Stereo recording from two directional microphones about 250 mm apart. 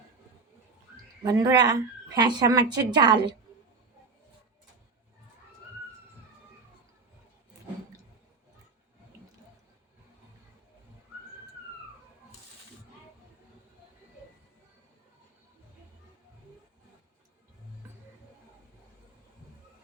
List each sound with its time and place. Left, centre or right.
1.2 s a woman's voice: centre